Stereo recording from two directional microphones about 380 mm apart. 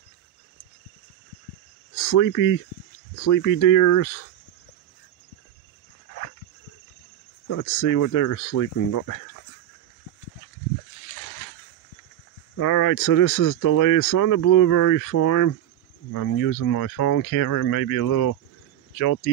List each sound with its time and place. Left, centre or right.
2.0 s speech: left
7.4 s speech: left
12.5 s speech: left